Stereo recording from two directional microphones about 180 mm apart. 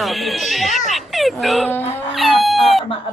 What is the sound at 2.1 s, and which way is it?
Cat, centre (ahead or behind).